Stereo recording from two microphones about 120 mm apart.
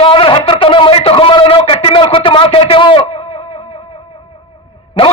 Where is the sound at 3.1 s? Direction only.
60° left (ahead or behind).